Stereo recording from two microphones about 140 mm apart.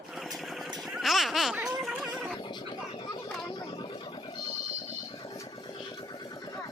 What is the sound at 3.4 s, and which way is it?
Vehicle, 30° left (ahead or behind).